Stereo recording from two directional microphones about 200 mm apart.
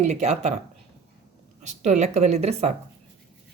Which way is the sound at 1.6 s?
35° right (ahead or behind).